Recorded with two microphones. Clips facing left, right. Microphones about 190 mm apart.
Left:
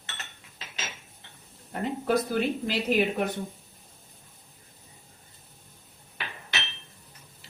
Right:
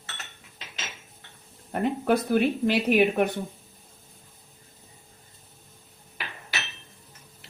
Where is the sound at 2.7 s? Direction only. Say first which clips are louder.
Right 4 dB; 65° right (ahead or behind).